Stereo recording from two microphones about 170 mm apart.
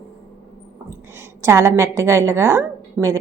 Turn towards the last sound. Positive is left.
turn(degrees=-20)  # may be behind; listen again after turning